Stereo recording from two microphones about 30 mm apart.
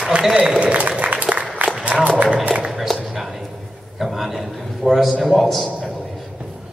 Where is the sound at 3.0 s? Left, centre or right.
Centre.